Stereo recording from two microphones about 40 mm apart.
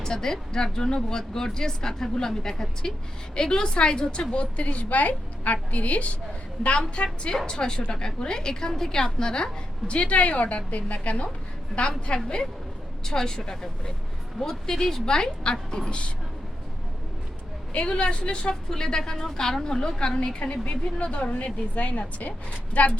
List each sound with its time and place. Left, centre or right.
0.0 s a woman's voice: centre; by 6.1 s left
6.7 s a woman's voice: left
14.7 s a woman's voice: centre
17.7 s a woman's voice: left
20.4 s a woman's voice: left